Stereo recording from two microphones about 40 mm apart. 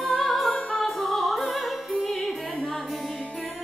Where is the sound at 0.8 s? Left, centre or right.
Centre.